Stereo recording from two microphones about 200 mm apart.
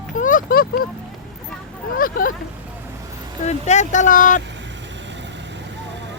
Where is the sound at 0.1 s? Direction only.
40° left (ahead or behind).